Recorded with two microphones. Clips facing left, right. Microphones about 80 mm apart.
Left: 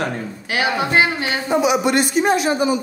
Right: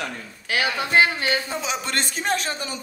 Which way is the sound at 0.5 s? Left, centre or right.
Left.